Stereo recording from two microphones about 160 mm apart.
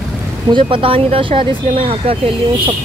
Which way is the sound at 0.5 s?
30° right (ahead or behind).